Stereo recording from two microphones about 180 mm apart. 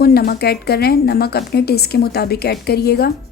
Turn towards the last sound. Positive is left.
turn(degrees=65)  # may be behind; listen again after turning